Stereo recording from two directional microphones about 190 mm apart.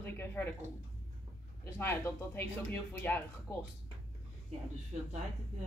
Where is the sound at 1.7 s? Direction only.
10° left (ahead or behind).